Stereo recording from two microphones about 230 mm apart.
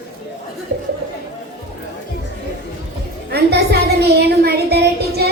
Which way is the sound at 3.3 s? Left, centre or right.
Right.